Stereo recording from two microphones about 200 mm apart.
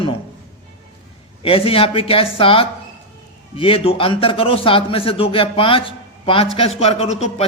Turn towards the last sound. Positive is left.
turn(degrees=30)  # may be behind; listen again after turning